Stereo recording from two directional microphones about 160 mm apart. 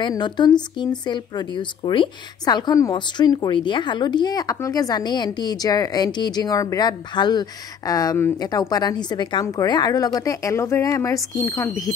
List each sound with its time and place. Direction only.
0.0 s speech: 30° left (ahead or behind)